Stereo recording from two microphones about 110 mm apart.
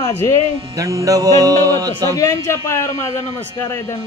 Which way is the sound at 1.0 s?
35° right (ahead or behind).